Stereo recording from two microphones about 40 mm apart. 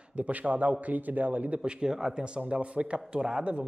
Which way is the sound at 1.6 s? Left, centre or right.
Centre.